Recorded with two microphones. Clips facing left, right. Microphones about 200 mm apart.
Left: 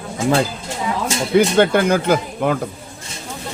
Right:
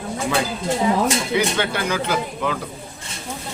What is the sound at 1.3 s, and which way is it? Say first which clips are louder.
Speech: left 8 dB; 50° left (ahead or behind).